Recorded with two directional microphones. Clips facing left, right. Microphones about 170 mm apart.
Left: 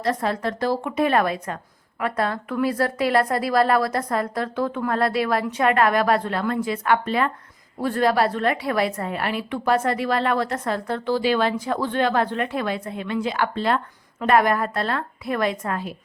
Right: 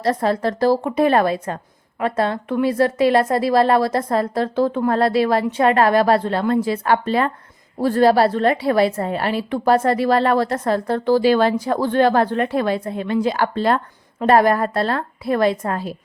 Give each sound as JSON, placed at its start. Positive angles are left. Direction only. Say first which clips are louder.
{"t": 0.0, "sound": "a woman's voice", "louder": "right 5 dB", "side_deg": -35}